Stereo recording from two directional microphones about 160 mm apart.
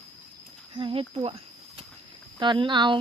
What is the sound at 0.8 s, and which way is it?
Speech, 35° right (ahead or behind).